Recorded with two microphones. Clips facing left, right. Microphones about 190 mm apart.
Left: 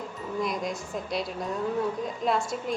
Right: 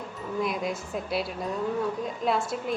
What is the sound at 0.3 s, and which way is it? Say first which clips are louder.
A woman's voice: right 1 dB; 5° right (ahead or behind).